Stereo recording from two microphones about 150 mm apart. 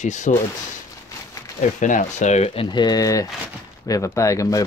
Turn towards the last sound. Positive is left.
turn(degrees=20)  # may be behind; listen again after turning